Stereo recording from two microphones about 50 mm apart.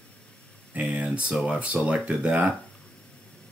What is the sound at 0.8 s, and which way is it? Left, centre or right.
Speech, right.